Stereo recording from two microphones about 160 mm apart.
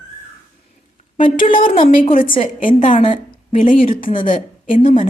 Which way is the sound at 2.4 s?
45° left (ahead or behind).